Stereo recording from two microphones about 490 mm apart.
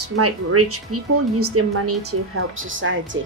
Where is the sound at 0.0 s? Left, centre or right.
Right.